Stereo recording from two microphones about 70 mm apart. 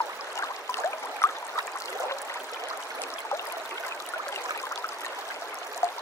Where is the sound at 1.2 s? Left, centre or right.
Left.